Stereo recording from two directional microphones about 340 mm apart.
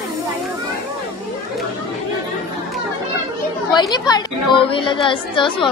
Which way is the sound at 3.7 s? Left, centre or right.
Centre.